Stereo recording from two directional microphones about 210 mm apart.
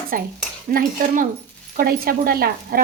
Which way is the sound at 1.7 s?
45° right (ahead or behind).